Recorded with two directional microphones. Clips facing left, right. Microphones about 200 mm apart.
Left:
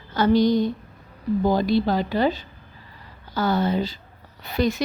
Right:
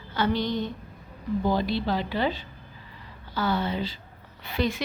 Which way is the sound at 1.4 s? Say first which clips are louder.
Left 6 dB; 45° left (ahead or behind).